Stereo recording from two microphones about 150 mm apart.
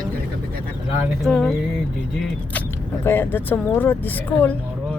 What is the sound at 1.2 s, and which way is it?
Speech, 5° left (ahead or behind).